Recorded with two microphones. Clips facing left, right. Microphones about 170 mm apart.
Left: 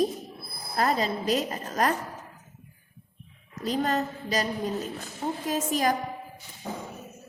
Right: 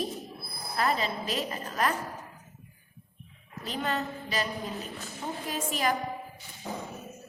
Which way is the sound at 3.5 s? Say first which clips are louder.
Left 5 dB; 40° left (ahead or behind).